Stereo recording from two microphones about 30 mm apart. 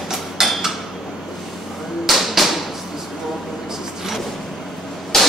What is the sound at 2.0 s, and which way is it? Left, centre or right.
Tap, centre.